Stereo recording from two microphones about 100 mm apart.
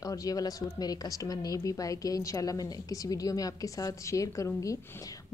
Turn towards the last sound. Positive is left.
turn(degrees=35)  # may be behind; listen again after turning